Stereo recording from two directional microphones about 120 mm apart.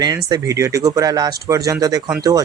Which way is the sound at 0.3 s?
25° right (ahead or behind).